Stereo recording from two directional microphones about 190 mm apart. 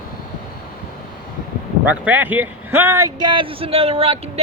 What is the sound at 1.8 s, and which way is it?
A man's voice, 10° right (ahead or behind).